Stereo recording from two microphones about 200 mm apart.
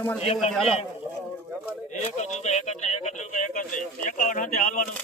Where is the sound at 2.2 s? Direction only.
35° left (ahead or behind).